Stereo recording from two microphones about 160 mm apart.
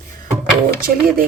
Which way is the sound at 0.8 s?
65° right (ahead or behind).